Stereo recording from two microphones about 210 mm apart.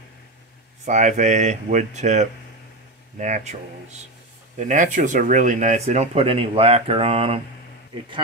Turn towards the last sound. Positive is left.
turn(degrees=-30)  # may be behind; listen again after turning